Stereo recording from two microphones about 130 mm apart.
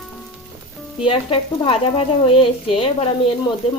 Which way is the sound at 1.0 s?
40° left (ahead or behind).